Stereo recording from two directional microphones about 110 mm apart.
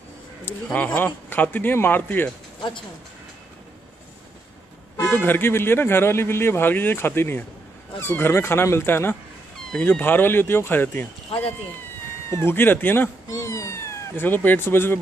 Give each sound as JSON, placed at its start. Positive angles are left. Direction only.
{"t": 0.7, "sound": "speech", "side_deg": 10}
{"t": 5.0, "sound": "speech", "side_deg": 20}
{"t": 12.3, "sound": "speech", "side_deg": 20}
{"t": 13.5, "sound": "speech", "side_deg": 30}